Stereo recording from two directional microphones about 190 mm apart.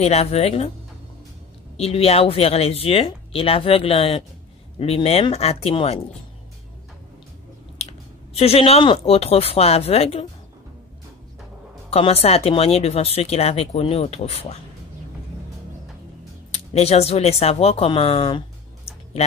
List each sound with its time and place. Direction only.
0.0 s speech: 35° left (ahead or behind)
1.8 s speech: 30° left (ahead or behind)
8.4 s speech: 30° left (ahead or behind)
11.9 s speech: 30° left (ahead or behind)
16.5 s speech: 35° left (ahead or behind)